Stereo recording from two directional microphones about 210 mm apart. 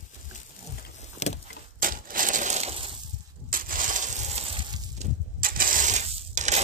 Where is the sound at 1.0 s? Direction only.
30° left (ahead or behind).